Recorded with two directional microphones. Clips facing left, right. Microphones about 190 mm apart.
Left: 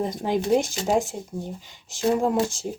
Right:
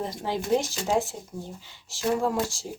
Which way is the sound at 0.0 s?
15° left (ahead or behind).